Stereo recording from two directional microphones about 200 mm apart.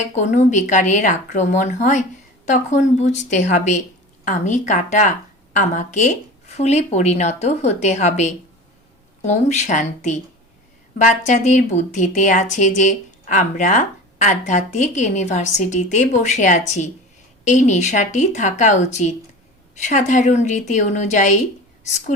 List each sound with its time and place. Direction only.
0.1 s speech: 35° left (ahead or behind)